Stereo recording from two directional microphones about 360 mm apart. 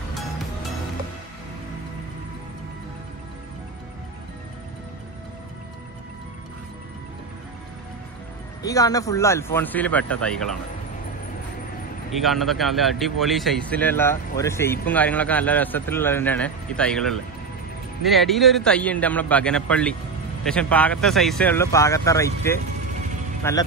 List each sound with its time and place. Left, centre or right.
8.6 s speech: centre
12.2 s speech: centre